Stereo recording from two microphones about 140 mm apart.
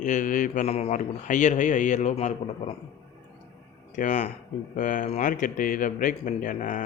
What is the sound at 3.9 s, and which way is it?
A man's voice, 65° left (ahead or behind).